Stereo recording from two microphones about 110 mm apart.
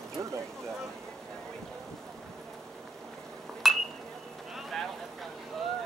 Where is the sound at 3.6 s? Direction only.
Centre (ahead or behind).